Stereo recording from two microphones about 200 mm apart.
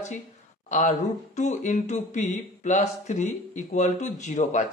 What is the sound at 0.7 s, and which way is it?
Speech, 35° left (ahead or behind).